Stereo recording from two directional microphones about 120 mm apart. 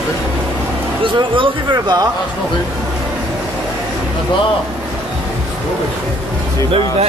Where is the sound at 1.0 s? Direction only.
45° right (ahead or behind).